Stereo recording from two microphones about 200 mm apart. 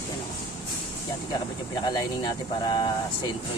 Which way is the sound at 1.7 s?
20° left (ahead or behind).